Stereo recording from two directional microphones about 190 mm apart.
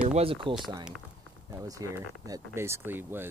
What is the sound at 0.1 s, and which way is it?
Speech, 30° right (ahead or behind).